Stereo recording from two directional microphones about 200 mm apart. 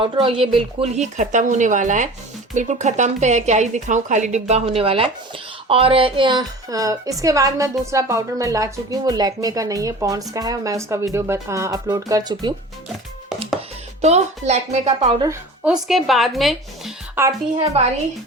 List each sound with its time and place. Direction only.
0.0 s a woman's voice: 25° right (ahead or behind)
14.0 s a woman's voice: 35° right (ahead or behind)
15.6 s speech: centre (ahead or behind)